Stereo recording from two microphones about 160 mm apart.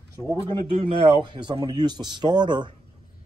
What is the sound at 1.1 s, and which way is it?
Speech, 30° right (ahead or behind).